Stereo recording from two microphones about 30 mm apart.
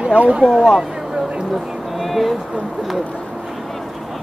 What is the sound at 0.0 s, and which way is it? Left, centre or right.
Speech, right.